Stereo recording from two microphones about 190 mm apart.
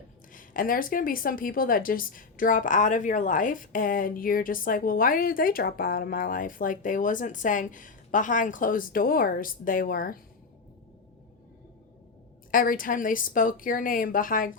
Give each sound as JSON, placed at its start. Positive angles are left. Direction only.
{"t": 0.3, "sound": "a woman's voice", "side_deg": 45}
{"t": 12.5, "sound": "a woman's voice", "side_deg": 45}